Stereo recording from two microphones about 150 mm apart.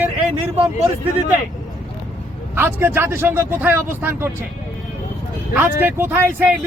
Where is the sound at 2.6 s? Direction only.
15° right (ahead or behind).